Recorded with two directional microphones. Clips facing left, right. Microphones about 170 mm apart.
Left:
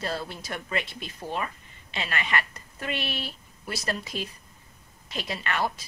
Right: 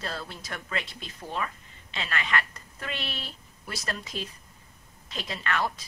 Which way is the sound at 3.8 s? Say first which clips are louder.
Left 3 dB; 10° left (ahead or behind).